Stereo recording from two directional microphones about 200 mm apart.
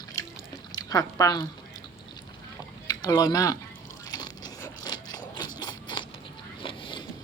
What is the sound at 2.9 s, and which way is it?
Speech, 20° left (ahead or behind).